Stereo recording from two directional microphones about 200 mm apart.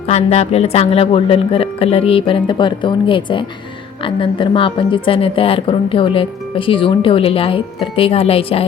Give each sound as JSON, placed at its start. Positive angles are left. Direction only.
{"t": 0.1, "sound": "a woman's voice", "side_deg": 30}